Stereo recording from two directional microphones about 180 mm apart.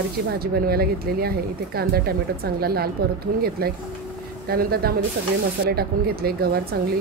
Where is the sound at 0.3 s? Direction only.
60° right (ahead or behind).